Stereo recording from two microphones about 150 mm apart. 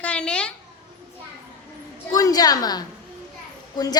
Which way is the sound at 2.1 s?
25° left (ahead or behind).